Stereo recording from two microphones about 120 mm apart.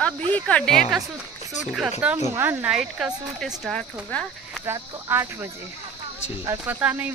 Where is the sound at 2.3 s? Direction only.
15° right (ahead or behind).